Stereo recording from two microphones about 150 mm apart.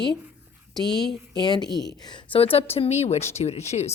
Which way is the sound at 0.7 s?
5° left (ahead or behind).